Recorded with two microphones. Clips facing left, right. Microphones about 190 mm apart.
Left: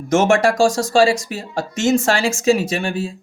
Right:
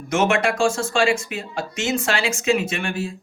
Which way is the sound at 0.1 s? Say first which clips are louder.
Left 5 dB; 45° left (ahead or behind).